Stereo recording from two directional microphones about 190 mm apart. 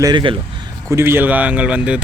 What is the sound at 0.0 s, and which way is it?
Speech, 25° right (ahead or behind).